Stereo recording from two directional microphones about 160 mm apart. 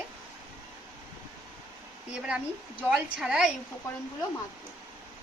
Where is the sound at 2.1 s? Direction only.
5° right (ahead or behind).